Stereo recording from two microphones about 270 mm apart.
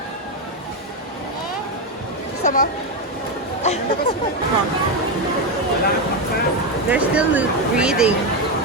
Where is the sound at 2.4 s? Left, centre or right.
Left.